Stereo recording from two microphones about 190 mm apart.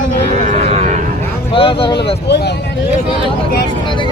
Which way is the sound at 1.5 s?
30° left (ahead or behind).